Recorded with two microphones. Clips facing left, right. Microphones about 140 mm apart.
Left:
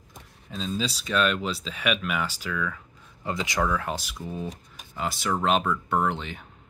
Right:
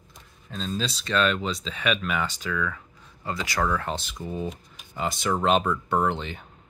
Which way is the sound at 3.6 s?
5° left (ahead or behind).